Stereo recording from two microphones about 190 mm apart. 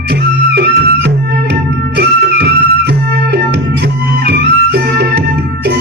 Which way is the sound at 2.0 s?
60° right (ahead or behind).